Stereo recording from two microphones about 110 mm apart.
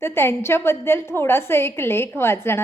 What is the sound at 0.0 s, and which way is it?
A woman's voice, 20° left (ahead or behind).